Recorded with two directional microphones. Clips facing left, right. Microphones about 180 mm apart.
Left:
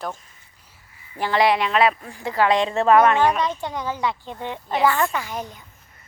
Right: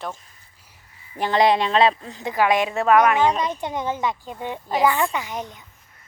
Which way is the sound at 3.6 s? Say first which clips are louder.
Right 1 dB; 20° right (ahead or behind).